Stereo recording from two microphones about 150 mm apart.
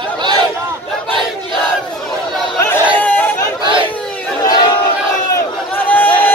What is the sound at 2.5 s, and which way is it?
Chatter, 15° left (ahead or behind).